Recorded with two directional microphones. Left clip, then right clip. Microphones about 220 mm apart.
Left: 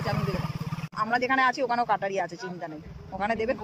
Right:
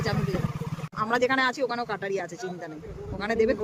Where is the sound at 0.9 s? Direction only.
Centre (ahead or behind).